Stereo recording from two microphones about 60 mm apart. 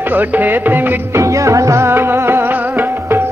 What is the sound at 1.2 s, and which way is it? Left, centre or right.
Music, right.